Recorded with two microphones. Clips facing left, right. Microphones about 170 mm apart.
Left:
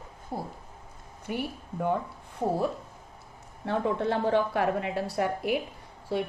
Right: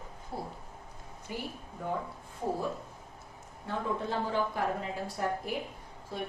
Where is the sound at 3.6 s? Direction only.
70° left (ahead or behind).